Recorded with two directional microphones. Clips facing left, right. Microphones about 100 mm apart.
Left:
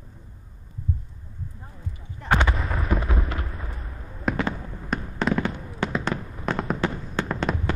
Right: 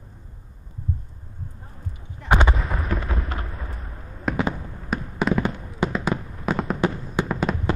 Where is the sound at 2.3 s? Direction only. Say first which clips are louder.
Right 2 dB; 20° right (ahead or behind).